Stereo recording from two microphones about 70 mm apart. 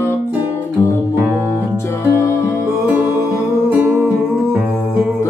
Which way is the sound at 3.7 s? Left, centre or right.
Right.